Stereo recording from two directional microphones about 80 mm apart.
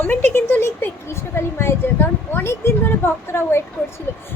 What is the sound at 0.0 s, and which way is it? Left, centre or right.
A woman's voice, left.